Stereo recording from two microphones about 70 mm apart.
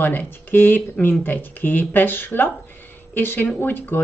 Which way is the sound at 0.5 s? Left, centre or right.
Left.